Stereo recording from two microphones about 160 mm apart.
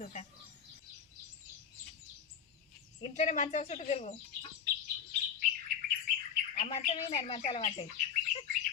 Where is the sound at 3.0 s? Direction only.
45° left (ahead or behind).